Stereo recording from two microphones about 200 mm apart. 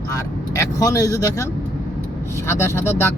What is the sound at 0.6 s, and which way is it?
Speech, 20° left (ahead or behind).